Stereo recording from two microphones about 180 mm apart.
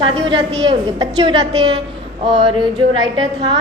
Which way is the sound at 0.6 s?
25° right (ahead or behind).